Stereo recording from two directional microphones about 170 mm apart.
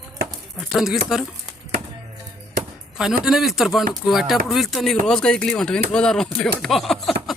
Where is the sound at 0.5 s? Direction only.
Centre (ahead or behind).